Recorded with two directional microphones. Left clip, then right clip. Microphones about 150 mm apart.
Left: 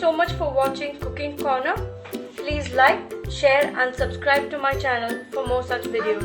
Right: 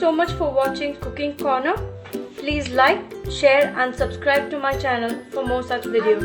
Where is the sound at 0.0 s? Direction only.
20° right (ahead or behind).